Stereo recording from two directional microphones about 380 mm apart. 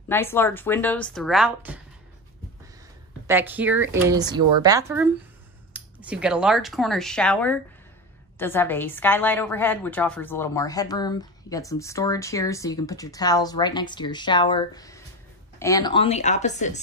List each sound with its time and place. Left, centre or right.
0.1 s speech: centre
3.3 s a woman's voice: centre